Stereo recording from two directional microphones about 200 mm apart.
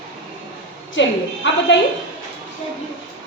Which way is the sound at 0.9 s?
65° left (ahead or behind).